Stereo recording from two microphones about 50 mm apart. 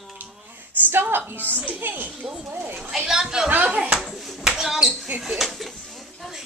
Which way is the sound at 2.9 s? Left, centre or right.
Centre.